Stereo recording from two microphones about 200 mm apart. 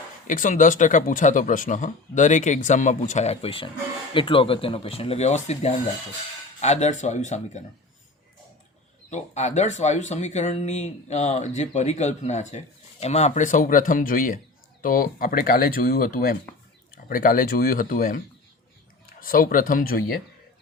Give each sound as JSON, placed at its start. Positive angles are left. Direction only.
{"t": 0.3, "sound": "speech", "side_deg": 40}
{"t": 9.0, "sound": "speech", "side_deg": 35}
{"t": 19.2, "sound": "speech", "side_deg": 45}